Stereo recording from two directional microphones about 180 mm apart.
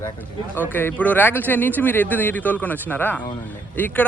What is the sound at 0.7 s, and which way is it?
A man's voice, 10° left (ahead or behind).